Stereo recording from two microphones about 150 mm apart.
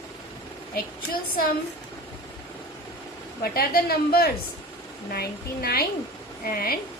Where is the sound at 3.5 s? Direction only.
90° left.